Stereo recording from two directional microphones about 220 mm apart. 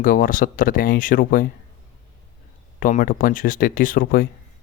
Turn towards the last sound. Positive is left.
turn(degrees=40)  # may be behind; listen again after turning